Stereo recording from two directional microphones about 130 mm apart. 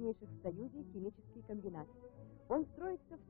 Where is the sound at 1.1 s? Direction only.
5° right (ahead or behind).